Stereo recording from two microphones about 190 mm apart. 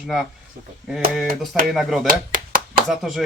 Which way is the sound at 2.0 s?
50° right (ahead or behind).